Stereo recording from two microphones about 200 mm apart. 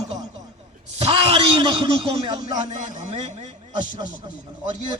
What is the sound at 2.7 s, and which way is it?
Speech, 40° right (ahead or behind).